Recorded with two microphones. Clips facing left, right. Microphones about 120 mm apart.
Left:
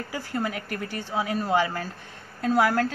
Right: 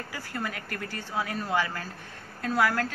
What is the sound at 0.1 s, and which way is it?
A woman's voice, 25° left (ahead or behind).